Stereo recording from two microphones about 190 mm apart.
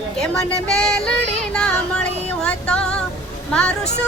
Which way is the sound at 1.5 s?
5° left (ahead or behind).